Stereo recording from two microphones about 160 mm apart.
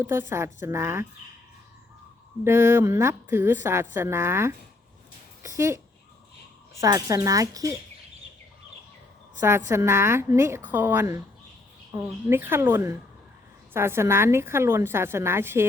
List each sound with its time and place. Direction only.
0.0 s a woman's voice: 15° right (ahead or behind)
2.4 s a woman's voice: 15° right (ahead or behind)
5.4 s a sound: 20° right (ahead or behind)
6.7 s speech: 20° right (ahead or behind)
9.4 s a woman's voice: 20° right (ahead or behind)